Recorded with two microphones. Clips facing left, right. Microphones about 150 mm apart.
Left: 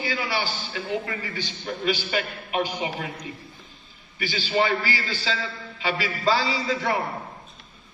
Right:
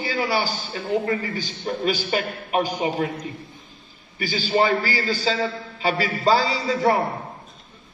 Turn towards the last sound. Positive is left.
turn(degrees=-40)  # may be behind; listen again after turning